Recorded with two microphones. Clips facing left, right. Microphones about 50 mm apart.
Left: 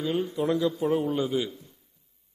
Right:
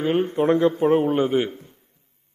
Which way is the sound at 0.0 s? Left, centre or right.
Right.